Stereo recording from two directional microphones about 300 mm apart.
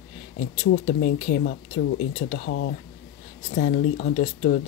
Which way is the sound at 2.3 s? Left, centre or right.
Left.